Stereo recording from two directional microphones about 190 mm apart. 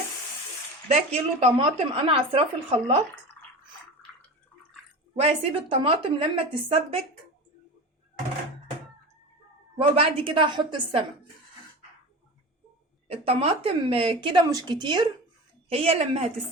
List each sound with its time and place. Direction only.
0.9 s a woman's voice: 35° right (ahead or behind)
5.1 s a woman's voice: 30° right (ahead or behind)
9.7 s a woman's voice: 30° right (ahead or behind)
13.1 s a woman's voice: 30° right (ahead or behind)